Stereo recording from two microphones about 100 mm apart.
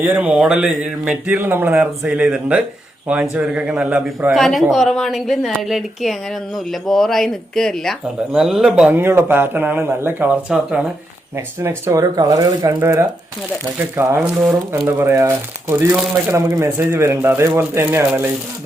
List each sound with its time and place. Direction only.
0.0 s speech: 20° right (ahead or behind)
4.4 s a woman's voice: centre (ahead or behind)
9.0 s speech: 20° right (ahead or behind)
10.5 s speech: 10° right (ahead or behind)
11.3 s speech: 30° right (ahead or behind)
14.2 s speech: 10° right (ahead or behind)
14.7 s speech: 25° right (ahead or behind)